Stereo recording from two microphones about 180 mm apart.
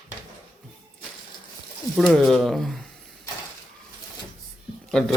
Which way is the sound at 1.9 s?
Centre (ahead or behind).